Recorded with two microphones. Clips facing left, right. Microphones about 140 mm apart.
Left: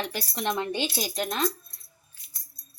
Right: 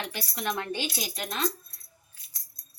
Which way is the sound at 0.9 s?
40° left (ahead or behind).